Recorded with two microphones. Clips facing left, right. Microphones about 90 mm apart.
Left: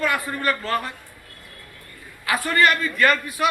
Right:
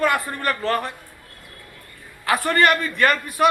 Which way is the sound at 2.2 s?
55° right (ahead or behind).